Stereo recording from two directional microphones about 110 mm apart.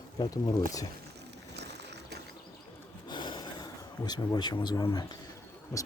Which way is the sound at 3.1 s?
45° left (ahead or behind).